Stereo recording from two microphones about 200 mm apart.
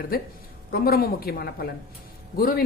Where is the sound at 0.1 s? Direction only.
50° left (ahead or behind).